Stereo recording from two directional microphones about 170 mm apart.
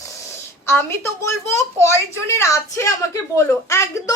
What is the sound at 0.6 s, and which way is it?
A woman's voice, 15° left (ahead or behind).